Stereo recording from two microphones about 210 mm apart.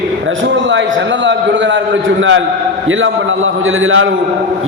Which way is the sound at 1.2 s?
65° right (ahead or behind).